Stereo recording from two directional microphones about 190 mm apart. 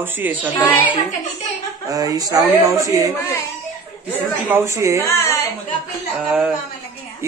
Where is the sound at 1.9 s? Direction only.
20° right (ahead or behind).